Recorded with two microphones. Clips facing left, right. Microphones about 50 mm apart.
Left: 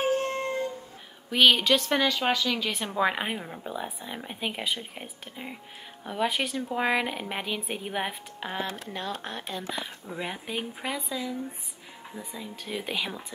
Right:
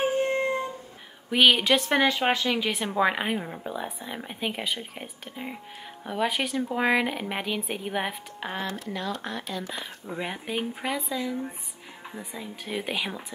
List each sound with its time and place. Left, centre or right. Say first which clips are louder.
0.0 s music: right 2 dB; centre
1.3 s speech: right 1 dB; centre
2.6 s speech: right 2 dB; centre
8.7 s speech: right 2 dB; left
10.0 s speech: right 2 dB; centre